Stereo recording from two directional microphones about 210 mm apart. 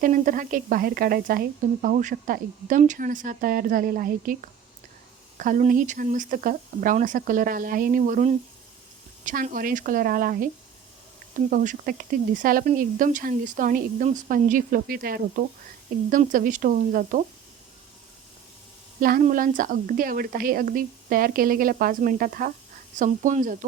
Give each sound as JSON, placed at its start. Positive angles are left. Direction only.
{"t": 0.0, "sound": "a woman's voice", "side_deg": -40}
{"t": 11.5, "sound": "a woman's voice", "side_deg": -40}
{"t": 18.9, "sound": "a woman's voice", "side_deg": -45}